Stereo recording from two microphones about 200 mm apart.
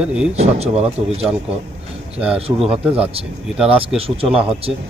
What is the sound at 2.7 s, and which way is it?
Speech, 5° right (ahead or behind).